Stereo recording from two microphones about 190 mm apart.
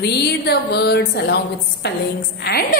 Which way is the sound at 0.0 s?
60° left (ahead or behind).